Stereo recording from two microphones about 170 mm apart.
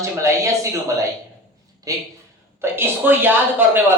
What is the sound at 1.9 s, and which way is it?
A man's voice, 20° right (ahead or behind).